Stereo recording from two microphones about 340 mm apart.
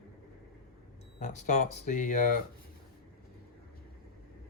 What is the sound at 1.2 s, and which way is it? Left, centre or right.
Speech, left.